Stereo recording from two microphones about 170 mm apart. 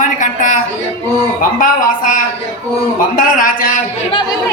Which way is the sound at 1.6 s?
55° left (ahead or behind).